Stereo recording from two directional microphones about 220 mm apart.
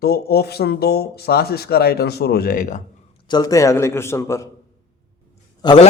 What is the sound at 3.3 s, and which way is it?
A man's voice, 15° left (ahead or behind).